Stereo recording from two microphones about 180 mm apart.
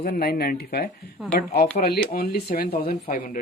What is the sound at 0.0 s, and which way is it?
Speech, 55° left (ahead or behind).